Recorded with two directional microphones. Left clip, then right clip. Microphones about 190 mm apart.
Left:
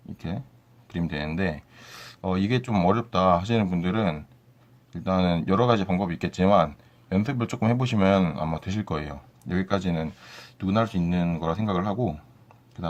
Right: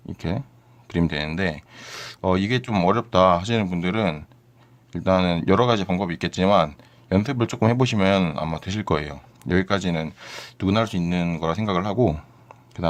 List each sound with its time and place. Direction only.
0.2 s speech: 35° right (ahead or behind)